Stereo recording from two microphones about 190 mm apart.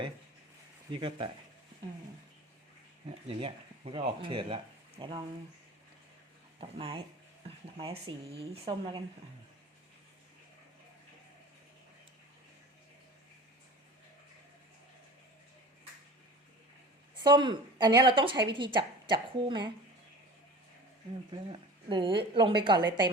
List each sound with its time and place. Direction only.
0.9 s a woman's voice: 25° right (ahead or behind)
3.2 s speech: 30° right (ahead or behind)
6.6 s a woman's voice: 30° right (ahead or behind)
17.2 s a woman's voice: 25° right (ahead or behind)
21.3 s a woman's voice: 25° right (ahead or behind)